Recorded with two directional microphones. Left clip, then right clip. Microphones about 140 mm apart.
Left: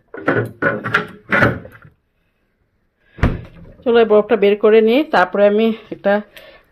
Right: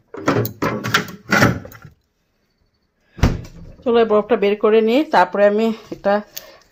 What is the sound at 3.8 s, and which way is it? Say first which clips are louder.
Speech: left 3 dB; centre (ahead or behind).